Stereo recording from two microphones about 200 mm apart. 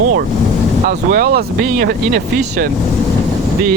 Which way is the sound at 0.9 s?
50° right (ahead or behind).